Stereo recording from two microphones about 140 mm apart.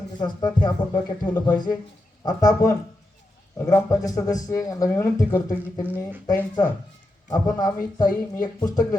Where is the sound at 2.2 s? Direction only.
25° left (ahead or behind).